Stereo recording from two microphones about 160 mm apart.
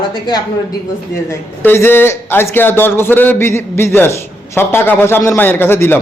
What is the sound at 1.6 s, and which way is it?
A man's voice, 15° left (ahead or behind).